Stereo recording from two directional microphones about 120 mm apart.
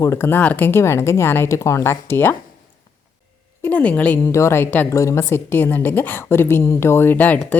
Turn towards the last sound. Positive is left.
turn(degrees=15)  # may be behind; listen again after turning